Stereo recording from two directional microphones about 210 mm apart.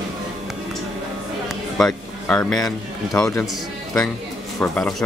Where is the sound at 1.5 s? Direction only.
Centre (ahead or behind).